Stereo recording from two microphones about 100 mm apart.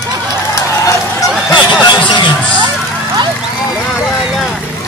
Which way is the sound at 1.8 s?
50° left (ahead or behind).